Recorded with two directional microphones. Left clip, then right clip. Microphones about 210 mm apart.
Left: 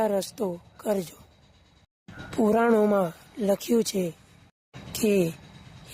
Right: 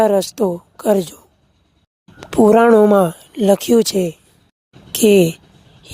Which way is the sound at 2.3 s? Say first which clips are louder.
Right 12 dB; 45° right (ahead or behind).